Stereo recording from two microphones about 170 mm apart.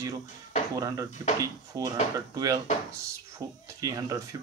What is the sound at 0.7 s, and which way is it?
Speech, 20° right (ahead or behind).